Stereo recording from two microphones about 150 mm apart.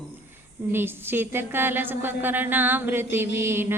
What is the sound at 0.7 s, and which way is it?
Mantra, 15° right (ahead or behind).